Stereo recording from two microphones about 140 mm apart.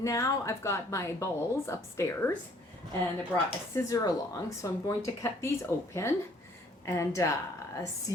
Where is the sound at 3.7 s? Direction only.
25° left (ahead or behind).